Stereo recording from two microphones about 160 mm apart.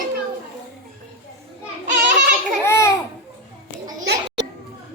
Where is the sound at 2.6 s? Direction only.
15° left (ahead or behind).